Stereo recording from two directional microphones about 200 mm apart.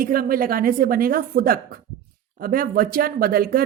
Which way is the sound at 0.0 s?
45° right (ahead or behind).